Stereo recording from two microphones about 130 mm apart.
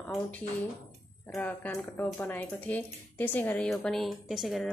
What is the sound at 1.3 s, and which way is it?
A woman's voice, 20° left (ahead or behind).